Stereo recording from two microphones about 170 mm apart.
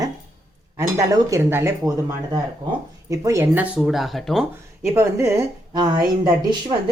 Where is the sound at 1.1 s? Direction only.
20° right (ahead or behind).